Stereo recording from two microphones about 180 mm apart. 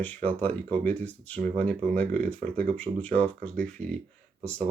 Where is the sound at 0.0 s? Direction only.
10° left (ahead or behind).